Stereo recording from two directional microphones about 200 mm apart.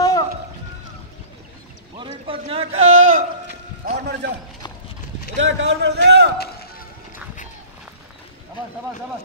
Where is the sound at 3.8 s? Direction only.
55° right (ahead or behind).